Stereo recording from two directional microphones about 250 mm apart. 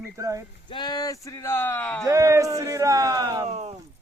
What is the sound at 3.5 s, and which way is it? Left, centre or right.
Speech, right.